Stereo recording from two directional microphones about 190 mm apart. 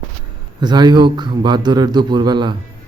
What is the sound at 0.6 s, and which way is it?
A man's voice, 20° right (ahead or behind).